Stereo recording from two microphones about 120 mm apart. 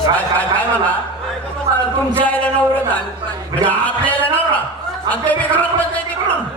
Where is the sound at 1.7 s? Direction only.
35° right (ahead or behind).